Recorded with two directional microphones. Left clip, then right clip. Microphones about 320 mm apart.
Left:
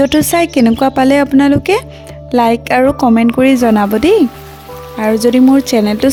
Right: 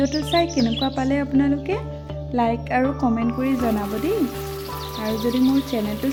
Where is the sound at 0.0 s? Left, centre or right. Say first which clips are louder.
Left 10 dB; left.